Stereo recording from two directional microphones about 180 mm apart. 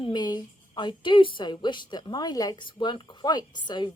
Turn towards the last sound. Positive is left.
turn(degrees=25)  # may be behind; listen again after turning